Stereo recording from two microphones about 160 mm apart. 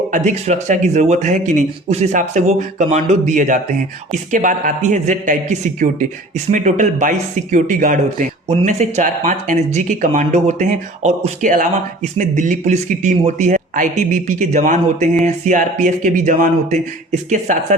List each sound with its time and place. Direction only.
0.1 s a man's voice: 45° right (ahead or behind)